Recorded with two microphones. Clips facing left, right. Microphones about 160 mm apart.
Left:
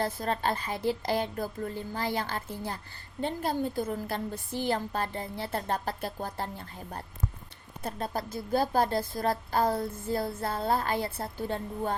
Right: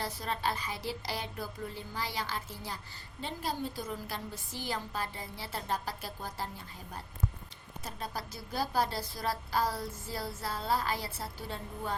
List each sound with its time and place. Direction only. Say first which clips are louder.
0.0 s a woman's voice: left 5 dB; 50° left (ahead or behind)
7.9 s a woman's voice: left 7 dB; 50° left (ahead or behind)